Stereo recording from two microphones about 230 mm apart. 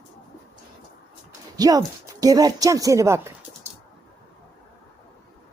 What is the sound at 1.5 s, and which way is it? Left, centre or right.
Speech, centre.